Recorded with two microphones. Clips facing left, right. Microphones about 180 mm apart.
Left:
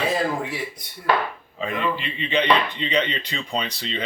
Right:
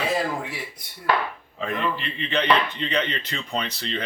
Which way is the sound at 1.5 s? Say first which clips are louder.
Left 1 dB; 10° left (ahead or behind).